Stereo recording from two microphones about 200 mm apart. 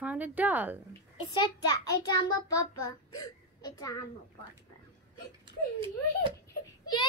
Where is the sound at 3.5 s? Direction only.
20° left (ahead or behind).